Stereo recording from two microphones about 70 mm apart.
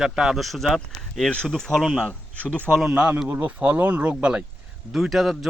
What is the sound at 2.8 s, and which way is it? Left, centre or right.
A man's voice, centre.